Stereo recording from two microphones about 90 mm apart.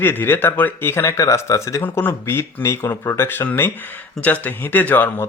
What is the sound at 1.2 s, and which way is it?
Speech, 35° left (ahead or behind).